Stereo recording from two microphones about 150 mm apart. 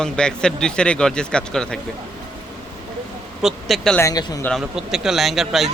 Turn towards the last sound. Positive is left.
turn(degrees=0)  # may be behind; listen again after turning